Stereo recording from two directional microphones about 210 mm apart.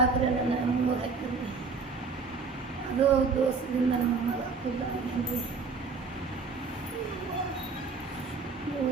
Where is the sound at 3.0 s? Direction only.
30° right (ahead or behind).